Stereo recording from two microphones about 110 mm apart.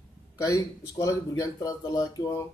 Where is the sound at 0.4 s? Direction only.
35° left (ahead or behind).